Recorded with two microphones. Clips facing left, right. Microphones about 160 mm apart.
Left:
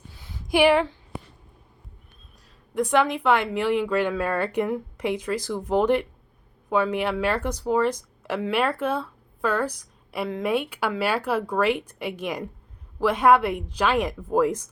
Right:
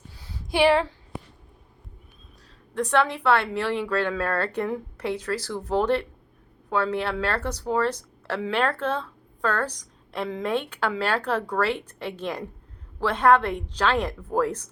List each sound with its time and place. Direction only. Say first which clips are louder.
0.1 s a sound: left 4 dB; 35° right (ahead or behind)
0.7 s a child's voice: left 1 dB; 30° right (ahead or behind)
2.7 s speech: left 2 dB; 10° left (ahead or behind)